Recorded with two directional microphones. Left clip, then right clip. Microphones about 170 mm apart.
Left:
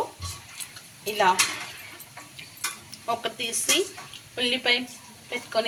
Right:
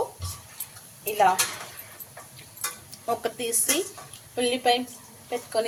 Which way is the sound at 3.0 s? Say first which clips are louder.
Right 1 dB; 40° right (ahead or behind).